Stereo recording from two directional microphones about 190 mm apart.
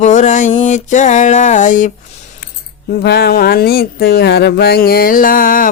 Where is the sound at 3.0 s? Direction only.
60° left (ahead or behind).